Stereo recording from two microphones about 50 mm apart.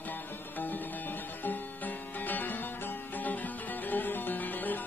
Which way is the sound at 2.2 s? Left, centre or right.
Left.